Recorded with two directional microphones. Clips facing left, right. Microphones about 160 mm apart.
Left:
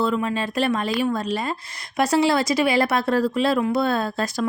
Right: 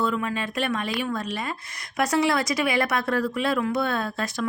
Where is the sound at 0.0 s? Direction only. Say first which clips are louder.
Left 3 dB; 30° left (ahead or behind).